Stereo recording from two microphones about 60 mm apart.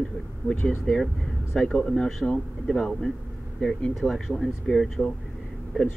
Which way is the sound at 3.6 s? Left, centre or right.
Left.